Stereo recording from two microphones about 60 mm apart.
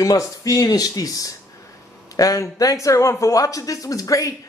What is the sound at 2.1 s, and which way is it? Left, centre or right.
A man's voice, left.